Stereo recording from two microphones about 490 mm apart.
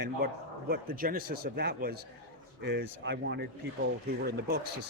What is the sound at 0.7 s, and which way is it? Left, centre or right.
Speech, centre.